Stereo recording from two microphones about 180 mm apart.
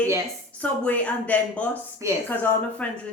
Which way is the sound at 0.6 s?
10° left (ahead or behind).